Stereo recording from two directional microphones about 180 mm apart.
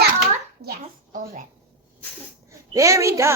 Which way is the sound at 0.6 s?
60° right (ahead or behind).